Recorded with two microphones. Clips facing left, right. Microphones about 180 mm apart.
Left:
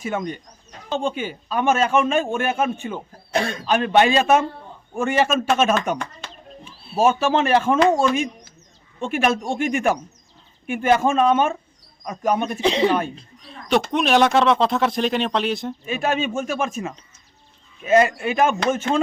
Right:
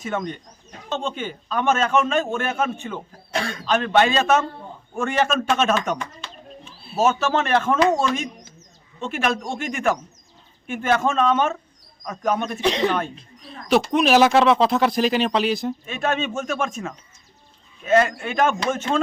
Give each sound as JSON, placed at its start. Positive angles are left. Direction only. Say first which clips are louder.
{"t": 0.0, "sound": "a man's voice", "louder": "left 1 dB", "side_deg": 10}
{"t": 6.9, "sound": "a man's voice", "louder": "left 2 dB", "side_deg": 10}
{"t": 12.5, "sound": "speech", "louder": "left 2 dB", "side_deg": 30}
{"t": 13.9, "sound": "a man's voice", "louder": "right 1 dB", "side_deg": 0}